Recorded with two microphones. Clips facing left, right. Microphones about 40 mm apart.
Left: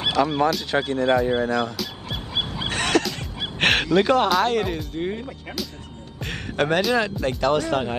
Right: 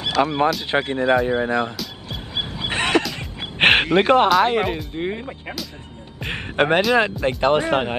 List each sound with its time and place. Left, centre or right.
0.2 s speech: right
2.7 s neigh: right
3.5 s a sound: right
3.8 s speech: right